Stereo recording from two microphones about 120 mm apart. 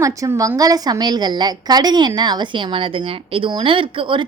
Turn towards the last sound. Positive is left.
turn(degrees=-45)  # may be behind; listen again after turning